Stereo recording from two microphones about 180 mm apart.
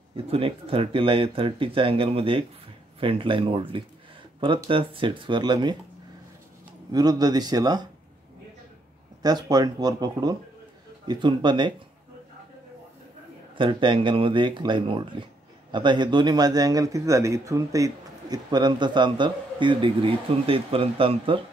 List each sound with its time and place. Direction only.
0.1 s a man's voice: 30° right (ahead or behind)
6.9 s a man's voice: 20° right (ahead or behind)
9.2 s a man's voice: 20° right (ahead or behind)
13.6 s a man's voice: 30° right (ahead or behind)